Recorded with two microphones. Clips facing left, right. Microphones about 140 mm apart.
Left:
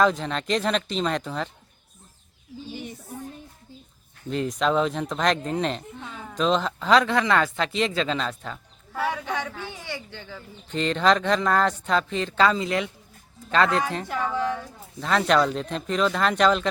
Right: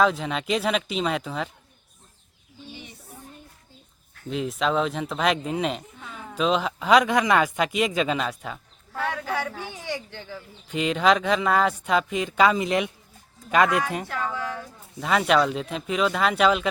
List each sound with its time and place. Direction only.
0.0 s speech: 5° right (ahead or behind)
4.3 s speech: 5° right (ahead or behind)
9.0 s speech: 5° left (ahead or behind)
9.3 s speech: 10° right (ahead or behind)
14.3 s a woman's voice: 20° left (ahead or behind)
14.6 s speech: 5° right (ahead or behind)